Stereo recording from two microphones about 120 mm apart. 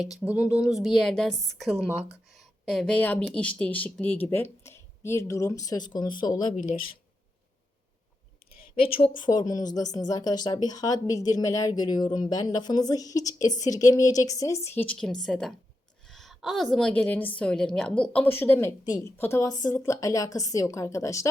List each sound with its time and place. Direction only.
0.0 s a woman's voice: 5° right (ahead or behind); by 6.4 s 35° left (ahead or behind)
8.5 s a sound: 50° left (ahead or behind)
9.1 s speech: 35° left (ahead or behind); by 14.9 s 20° left (ahead or behind)
15.2 s a woman's voice: 5° left (ahead or behind)
18.9 s speech: 30° left (ahead or behind)
19.1 s speech: 20° left (ahead or behind)
19.5 s speech: 35° left (ahead or behind)
19.7 s speech: 25° left (ahead or behind)